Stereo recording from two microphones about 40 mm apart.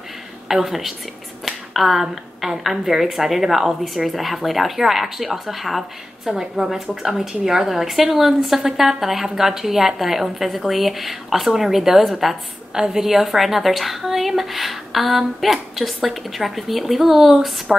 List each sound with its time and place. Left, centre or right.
0.5 s a woman's voice: centre
6.2 s a woman's voice: centre